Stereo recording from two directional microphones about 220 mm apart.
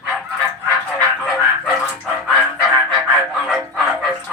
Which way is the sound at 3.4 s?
Centre (ahead or behind).